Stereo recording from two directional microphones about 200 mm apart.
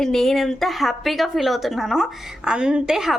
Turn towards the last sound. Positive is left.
turn(degrees=-5)  # may be behind; listen again after turning